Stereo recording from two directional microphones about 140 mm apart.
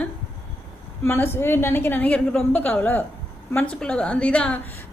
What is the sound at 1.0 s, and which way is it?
A woman's voice, 15° left (ahead or behind).